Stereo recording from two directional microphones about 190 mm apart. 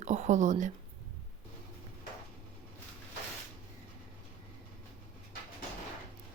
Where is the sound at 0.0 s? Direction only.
40° right (ahead or behind).